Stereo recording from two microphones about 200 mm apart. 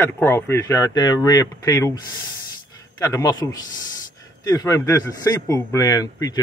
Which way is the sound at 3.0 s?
20° left (ahead or behind).